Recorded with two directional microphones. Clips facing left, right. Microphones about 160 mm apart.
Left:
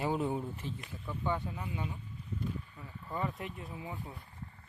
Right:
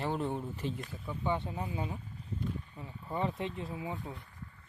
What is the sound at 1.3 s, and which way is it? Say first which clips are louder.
Speech: right 2 dB; 25° right (ahead or behind).